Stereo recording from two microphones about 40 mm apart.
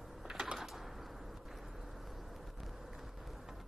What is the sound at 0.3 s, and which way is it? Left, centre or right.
Typewriter, centre.